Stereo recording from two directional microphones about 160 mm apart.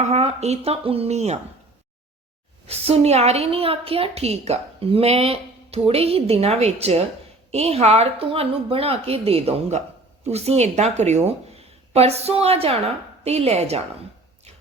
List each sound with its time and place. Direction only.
0.0 s a woman's voice: 40° right (ahead or behind)
2.6 s a woman's voice: 40° right (ahead or behind)